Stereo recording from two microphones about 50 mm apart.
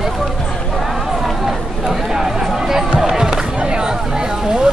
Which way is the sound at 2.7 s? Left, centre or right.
Centre.